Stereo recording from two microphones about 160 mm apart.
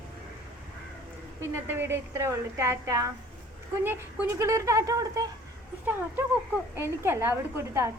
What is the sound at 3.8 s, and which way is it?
Speech, 15° right (ahead or behind).